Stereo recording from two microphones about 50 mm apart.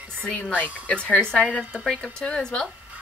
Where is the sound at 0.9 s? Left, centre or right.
Left.